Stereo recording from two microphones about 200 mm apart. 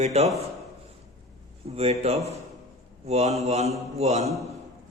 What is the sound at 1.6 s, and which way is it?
A man's voice, 30° right (ahead or behind).